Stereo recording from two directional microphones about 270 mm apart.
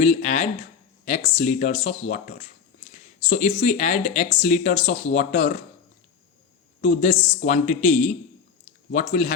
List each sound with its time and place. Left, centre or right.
0.0 s speech: left
6.8 s speech: left